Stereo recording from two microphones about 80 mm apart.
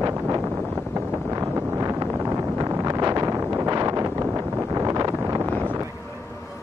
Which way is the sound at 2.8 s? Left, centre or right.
Right.